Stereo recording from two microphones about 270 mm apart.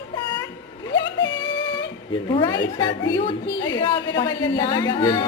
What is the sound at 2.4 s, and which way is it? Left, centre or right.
Speech, centre.